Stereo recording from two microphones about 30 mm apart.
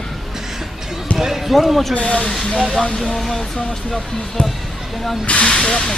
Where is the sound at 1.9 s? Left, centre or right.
Left.